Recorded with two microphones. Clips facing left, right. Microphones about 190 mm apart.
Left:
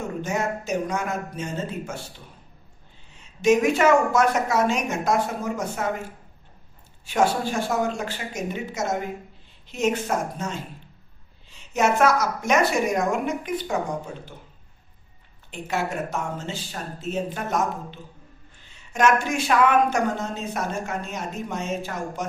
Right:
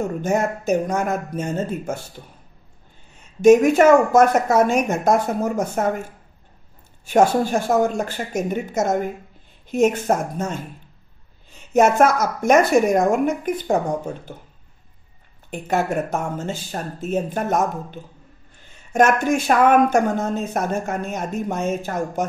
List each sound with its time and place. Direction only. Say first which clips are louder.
0.2 s speech: right 4 dB; 50° right (ahead or behind)
7.1 s speech: right 6 dB; 45° right (ahead or behind)
15.5 s speech: right 6 dB; 50° right (ahead or behind)